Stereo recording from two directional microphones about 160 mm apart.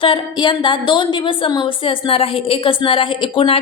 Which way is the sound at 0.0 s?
30° left (ahead or behind).